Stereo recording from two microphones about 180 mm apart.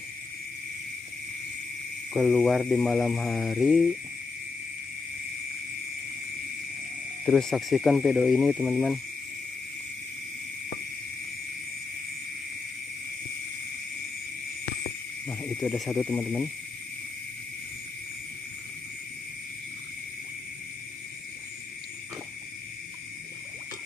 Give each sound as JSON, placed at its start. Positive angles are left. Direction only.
{"t": 2.1, "sound": "speech", "side_deg": -5}
{"t": 7.2, "sound": "speech", "side_deg": 0}
{"t": 15.2, "sound": "speech", "side_deg": 0}